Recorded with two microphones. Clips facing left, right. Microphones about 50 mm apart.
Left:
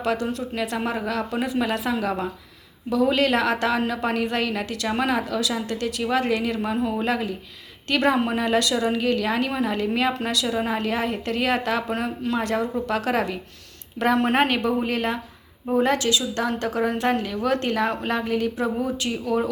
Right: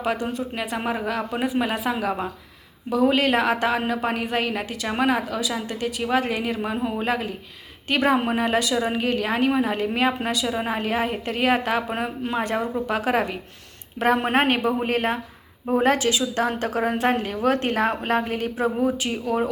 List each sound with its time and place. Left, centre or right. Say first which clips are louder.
0.0 s a woman's voice: even; centre
14.8 s a woman's voice: right 2 dB; right